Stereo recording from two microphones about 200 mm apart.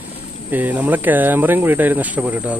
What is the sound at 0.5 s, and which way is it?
Speech, 10° right (ahead or behind).